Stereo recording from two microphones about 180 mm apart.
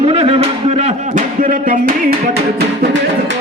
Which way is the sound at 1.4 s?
50° right (ahead or behind).